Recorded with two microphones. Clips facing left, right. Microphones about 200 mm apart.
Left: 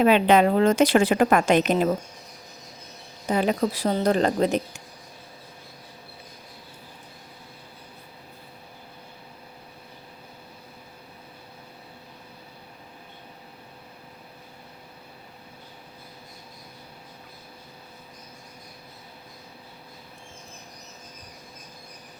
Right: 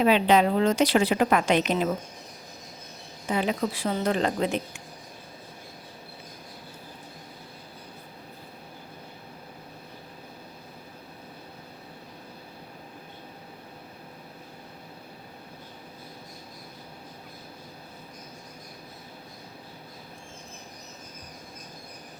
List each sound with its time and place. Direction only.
0.0 s a woman's voice: 55° left (ahead or behind)
3.2 s speech: 40° left (ahead or behind)